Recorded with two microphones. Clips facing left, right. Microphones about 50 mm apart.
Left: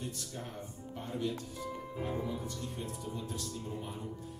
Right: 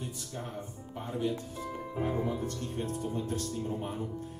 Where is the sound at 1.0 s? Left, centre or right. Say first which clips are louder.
Right 4 dB; centre.